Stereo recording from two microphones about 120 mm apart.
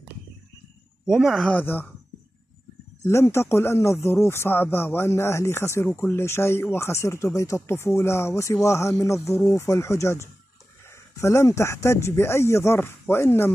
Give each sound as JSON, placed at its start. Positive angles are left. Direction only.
{"t": 1.1, "sound": "speech", "side_deg": 0}
{"t": 1.5, "sound": "speech", "side_deg": 15}
{"t": 3.0, "sound": "speech", "side_deg": 25}